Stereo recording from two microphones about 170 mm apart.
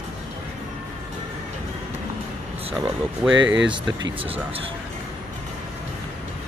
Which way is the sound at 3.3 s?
90° right.